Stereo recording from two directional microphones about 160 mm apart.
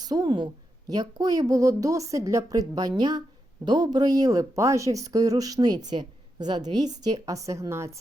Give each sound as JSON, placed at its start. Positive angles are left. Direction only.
{"t": 0.0, "sound": "a woman's voice", "side_deg": -25}